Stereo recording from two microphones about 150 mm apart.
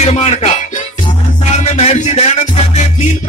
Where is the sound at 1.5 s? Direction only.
50° left (ahead or behind).